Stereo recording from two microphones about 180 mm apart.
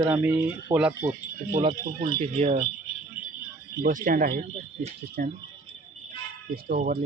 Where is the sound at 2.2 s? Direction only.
35° right (ahead or behind).